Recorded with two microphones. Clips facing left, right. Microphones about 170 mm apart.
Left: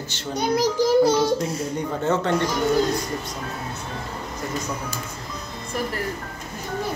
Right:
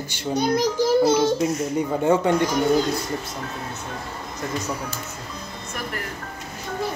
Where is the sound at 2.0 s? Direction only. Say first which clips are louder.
Right 3 dB; 10° right (ahead or behind).